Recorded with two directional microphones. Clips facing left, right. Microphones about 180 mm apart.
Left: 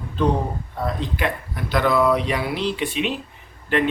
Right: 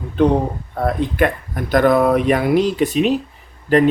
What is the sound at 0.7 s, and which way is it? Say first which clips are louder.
Speech: right 8 dB; 55° right (ahead or behind).